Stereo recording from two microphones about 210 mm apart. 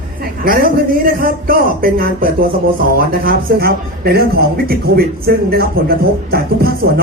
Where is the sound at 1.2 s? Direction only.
45° right (ahead or behind).